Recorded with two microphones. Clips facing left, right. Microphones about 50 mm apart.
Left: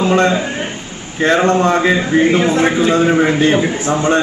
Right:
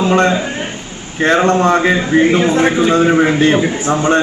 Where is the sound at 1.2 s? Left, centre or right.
Centre.